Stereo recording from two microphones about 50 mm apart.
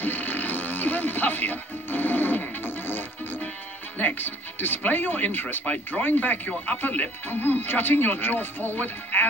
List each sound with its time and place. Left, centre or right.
0.0 s music: left
4.0 s speech: left
7.2 s speech: left